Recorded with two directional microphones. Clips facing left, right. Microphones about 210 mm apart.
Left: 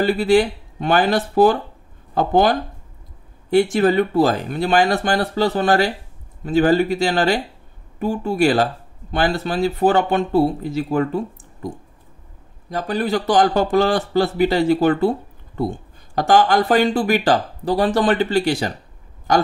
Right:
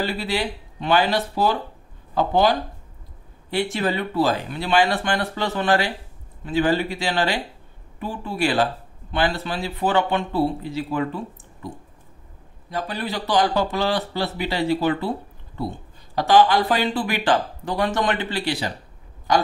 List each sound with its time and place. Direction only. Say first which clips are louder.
0.0 s a man's voice: left 9 dB; 50° left (ahead or behind)